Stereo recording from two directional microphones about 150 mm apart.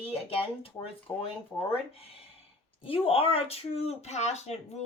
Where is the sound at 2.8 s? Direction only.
40° left (ahead or behind).